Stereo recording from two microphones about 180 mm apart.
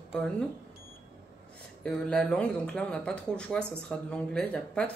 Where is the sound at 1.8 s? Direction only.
5° left (ahead or behind).